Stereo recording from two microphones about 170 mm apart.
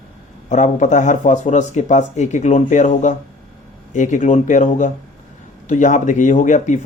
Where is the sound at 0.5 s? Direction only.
45° left (ahead or behind).